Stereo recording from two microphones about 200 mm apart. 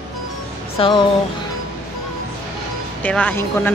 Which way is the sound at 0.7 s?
25° left (ahead or behind).